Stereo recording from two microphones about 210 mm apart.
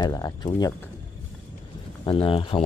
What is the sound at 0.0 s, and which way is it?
Speech, 20° left (ahead or behind).